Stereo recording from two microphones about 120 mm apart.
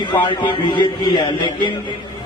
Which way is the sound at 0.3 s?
40° left (ahead or behind).